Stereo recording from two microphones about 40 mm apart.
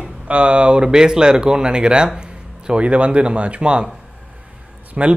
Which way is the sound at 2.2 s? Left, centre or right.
Right.